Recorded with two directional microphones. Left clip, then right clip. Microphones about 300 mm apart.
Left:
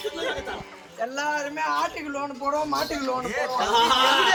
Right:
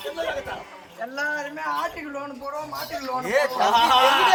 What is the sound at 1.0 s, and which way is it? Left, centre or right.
Speech, left.